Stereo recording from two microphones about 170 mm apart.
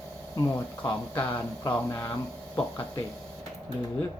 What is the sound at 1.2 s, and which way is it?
Speech, 15° left (ahead or behind).